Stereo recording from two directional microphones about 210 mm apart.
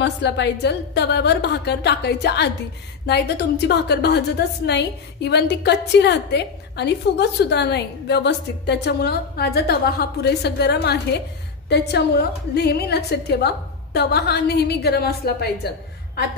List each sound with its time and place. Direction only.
0.0 s a woman's voice: 55° left (ahead or behind)